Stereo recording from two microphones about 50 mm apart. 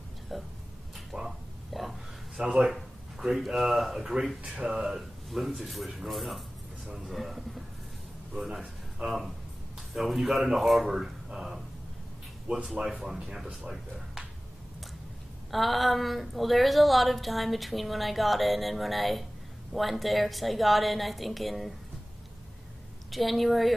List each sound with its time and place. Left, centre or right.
0.3 s speech: centre
0.9 s a sound: centre
2.4 s speech: centre
2.7 s a man's voice: centre
12.7 s speech: right
13.0 s speech: centre
15.5 s speech: centre
23.1 s speech: centre